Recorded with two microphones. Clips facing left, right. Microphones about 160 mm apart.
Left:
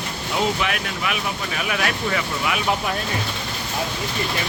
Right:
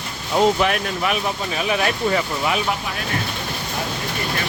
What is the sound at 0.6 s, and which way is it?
Speech, 40° right (ahead or behind).